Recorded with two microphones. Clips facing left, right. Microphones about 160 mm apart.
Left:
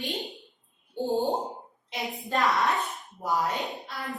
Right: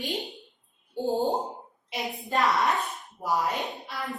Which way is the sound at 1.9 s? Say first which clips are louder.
Even; centre (ahead or behind).